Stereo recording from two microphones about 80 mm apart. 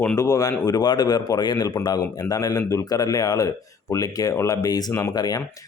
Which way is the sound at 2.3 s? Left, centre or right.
Left.